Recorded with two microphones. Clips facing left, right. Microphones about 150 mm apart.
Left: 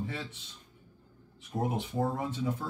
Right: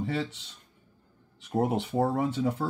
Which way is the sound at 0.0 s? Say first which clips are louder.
Right 7 dB; 75° right (ahead or behind).